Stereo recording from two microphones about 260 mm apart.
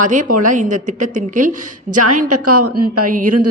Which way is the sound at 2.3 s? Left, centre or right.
Right.